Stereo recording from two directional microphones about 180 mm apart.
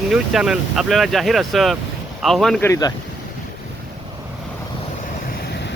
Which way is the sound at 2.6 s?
15° left (ahead or behind).